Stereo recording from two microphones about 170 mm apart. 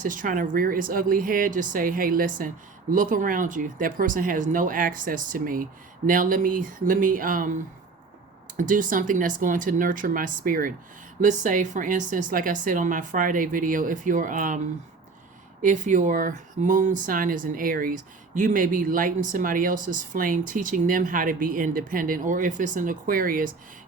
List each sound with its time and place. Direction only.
0.0 s speech: 50° right (ahead or behind)
15.6 s speech: 45° right (ahead or behind)